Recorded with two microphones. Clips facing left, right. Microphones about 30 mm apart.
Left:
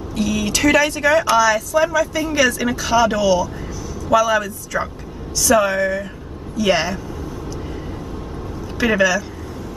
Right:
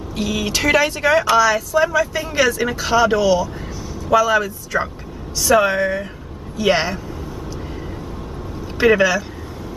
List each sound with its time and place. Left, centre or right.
0.1 s speech: centre
8.7 s speech: centre